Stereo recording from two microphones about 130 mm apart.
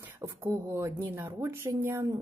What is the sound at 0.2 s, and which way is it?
A woman's voice, 20° right (ahead or behind).